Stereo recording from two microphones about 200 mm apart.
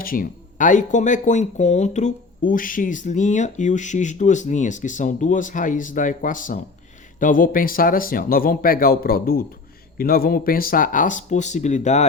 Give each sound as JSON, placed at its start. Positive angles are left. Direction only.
{"t": 0.0, "sound": "speech", "side_deg": 45}